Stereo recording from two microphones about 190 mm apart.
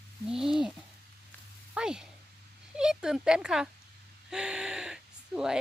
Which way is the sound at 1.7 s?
5° right (ahead or behind).